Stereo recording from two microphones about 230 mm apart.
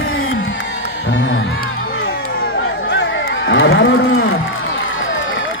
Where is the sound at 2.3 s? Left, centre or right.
Left.